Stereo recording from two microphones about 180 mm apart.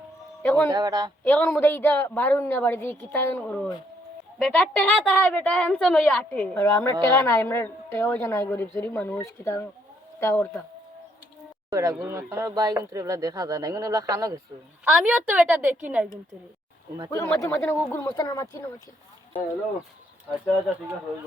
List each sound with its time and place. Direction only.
0.4 s a woman's voice: 10° left (ahead or behind)
0.7 s speech: 20° right (ahead or behind)
1.2 s a woman's voice: 10° left (ahead or behind)
11.7 s speech: 15° right (ahead or behind)
14.8 s a woman's voice: 5° right (ahead or behind)
17.1 s a woman's voice: 15° left (ahead or behind)